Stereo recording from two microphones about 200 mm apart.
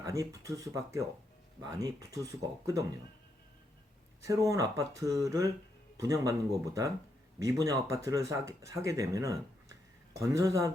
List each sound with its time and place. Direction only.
0.0 s speech: 15° right (ahead or behind)
4.3 s speech: 15° right (ahead or behind)